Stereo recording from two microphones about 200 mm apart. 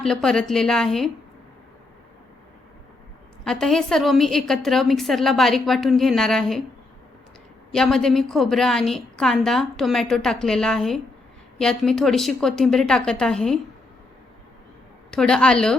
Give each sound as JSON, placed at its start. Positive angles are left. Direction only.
{"t": 0.0, "sound": "a woman's voice", "side_deg": 0}
{"t": 3.4, "sound": "a woman's voice", "side_deg": 5}
{"t": 7.7, "sound": "a woman's voice", "side_deg": 5}
{"t": 15.1, "sound": "a woman's voice", "side_deg": 5}